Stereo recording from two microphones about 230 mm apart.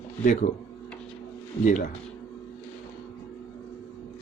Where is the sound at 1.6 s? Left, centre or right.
Left.